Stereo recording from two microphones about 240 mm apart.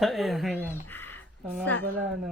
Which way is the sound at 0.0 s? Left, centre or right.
Centre.